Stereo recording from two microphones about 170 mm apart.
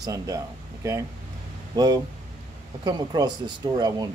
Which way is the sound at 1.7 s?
25° right (ahead or behind).